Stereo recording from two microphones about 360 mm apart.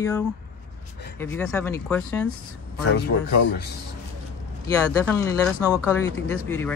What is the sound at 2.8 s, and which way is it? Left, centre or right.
Speech, left.